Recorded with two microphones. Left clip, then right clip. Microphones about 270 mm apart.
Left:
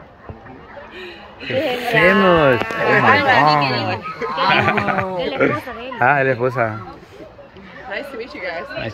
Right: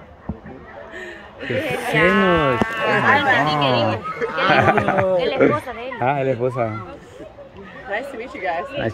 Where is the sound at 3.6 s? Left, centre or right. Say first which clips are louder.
Right 2 dB; centre.